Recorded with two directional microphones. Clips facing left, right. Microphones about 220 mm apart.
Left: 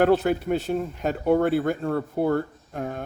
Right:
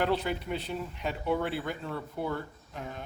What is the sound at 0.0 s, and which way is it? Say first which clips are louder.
A man's voice: left 9 dB; 50° left (ahead or behind).